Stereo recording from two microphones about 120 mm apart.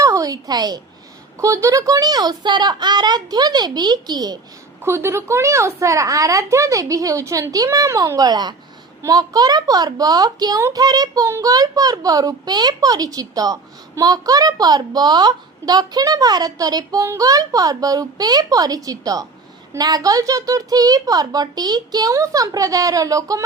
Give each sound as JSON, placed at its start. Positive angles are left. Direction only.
{"t": 0.0, "sound": "a woman's voice", "side_deg": -30}
{"t": 4.8, "sound": "a woman's voice", "side_deg": -20}